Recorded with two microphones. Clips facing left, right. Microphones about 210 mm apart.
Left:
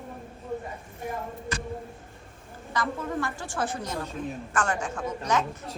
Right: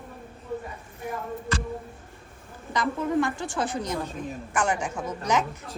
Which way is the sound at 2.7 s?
15° right (ahead or behind).